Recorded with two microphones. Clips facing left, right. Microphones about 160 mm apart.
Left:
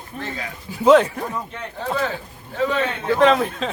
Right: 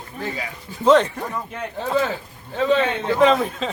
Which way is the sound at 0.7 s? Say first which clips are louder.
Left 4 dB; 10° left (ahead or behind).